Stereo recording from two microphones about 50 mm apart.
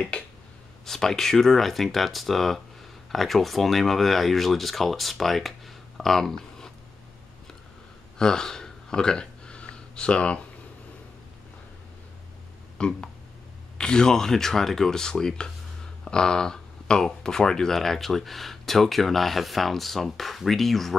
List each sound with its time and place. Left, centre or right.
0.8 s speech: centre
8.2 s a sound: centre
12.7 s speech: centre